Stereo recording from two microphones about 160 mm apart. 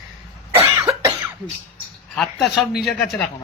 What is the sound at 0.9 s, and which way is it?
Cough, 20° right (ahead or behind).